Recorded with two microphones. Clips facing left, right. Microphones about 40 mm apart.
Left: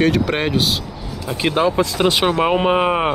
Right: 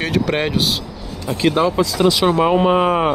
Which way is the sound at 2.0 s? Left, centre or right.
Left.